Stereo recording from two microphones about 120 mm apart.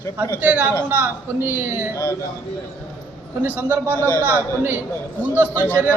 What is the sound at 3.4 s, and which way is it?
Speech, 15° right (ahead or behind).